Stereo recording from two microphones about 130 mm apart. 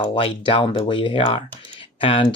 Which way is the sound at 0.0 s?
40° left (ahead or behind).